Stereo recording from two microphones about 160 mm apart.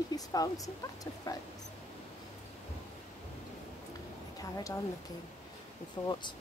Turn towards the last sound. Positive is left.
turn(degrees=30)  # may be behind; listen again after turning